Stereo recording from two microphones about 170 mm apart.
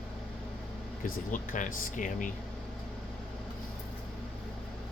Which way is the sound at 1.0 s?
50° left (ahead or behind).